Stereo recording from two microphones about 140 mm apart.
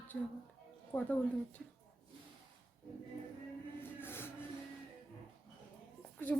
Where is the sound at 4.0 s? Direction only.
15° left (ahead or behind).